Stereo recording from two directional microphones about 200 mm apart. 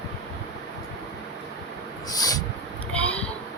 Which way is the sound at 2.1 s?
20° left (ahead or behind).